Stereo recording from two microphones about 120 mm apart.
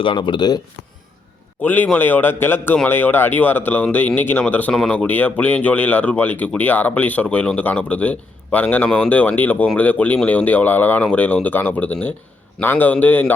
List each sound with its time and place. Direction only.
0.0 s speech: 45° left (ahead or behind)
1.6 s speech: 15° left (ahead or behind)